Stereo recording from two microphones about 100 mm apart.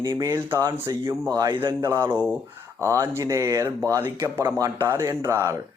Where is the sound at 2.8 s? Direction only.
25° right (ahead or behind).